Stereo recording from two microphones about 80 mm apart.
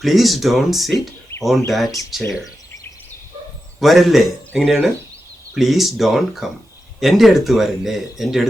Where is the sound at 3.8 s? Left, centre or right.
Centre.